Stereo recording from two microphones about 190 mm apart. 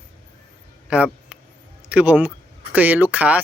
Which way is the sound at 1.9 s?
5° right (ahead or behind).